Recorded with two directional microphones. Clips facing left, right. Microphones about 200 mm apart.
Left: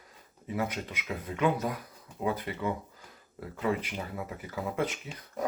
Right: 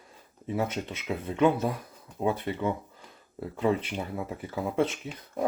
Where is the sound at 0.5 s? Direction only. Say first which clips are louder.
Right 3 dB; 25° right (ahead or behind).